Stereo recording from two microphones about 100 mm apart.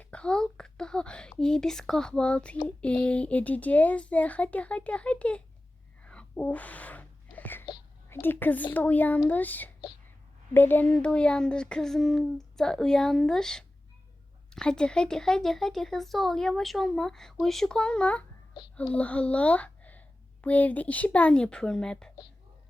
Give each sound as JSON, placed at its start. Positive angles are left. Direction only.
{"t": 0.0, "sound": "speech", "side_deg": 10}
{"t": 6.0, "sound": "a sound", "side_deg": 10}
{"t": 8.1, "sound": "a woman's voice", "side_deg": 20}